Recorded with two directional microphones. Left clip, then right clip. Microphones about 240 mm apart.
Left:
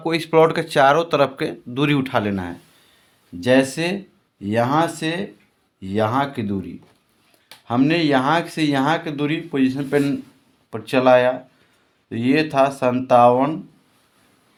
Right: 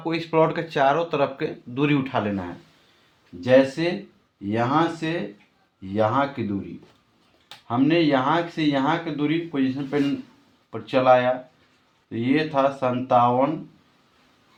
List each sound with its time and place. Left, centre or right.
0.0 s speech: left
3.4 s speech: left
7.7 s speech: left